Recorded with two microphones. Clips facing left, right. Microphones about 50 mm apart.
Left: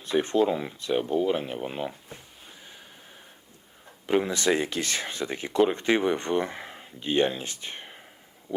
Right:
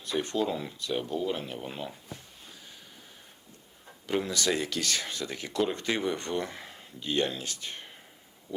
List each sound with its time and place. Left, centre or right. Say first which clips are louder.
0.0 s speech: left 6 dB; left
4.0 s speech: left 5 dB; left
8.5 s a sound: left 5 dB; left